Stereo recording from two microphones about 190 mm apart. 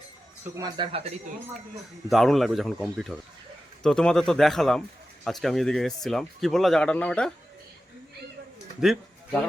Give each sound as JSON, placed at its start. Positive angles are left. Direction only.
{"t": 0.5, "sound": "speech", "side_deg": -20}
{"t": 2.0, "sound": "speech", "side_deg": 0}
{"t": 8.8, "sound": "speech", "side_deg": 0}